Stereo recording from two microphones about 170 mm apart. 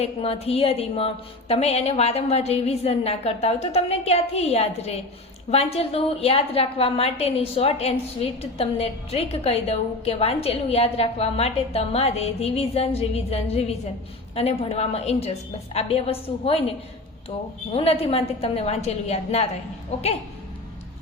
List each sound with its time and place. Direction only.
0.0 s a woman's voice: 35° left (ahead or behind)